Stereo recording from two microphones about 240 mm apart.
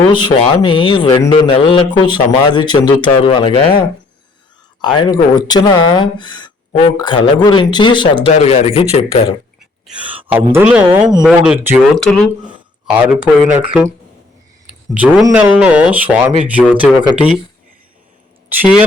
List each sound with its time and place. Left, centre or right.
0.1 s speech: centre
4.8 s speech: centre
9.8 s speech: centre
14.9 s speech: centre
18.4 s speech: centre